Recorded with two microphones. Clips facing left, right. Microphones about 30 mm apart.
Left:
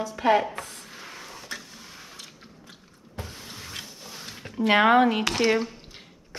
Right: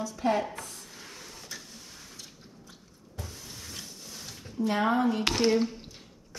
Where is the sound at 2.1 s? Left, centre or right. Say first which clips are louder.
Left 4 dB; left.